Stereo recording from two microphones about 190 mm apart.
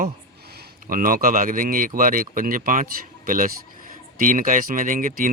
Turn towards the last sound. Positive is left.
turn(degrees=-45)  # may be behind; listen again after turning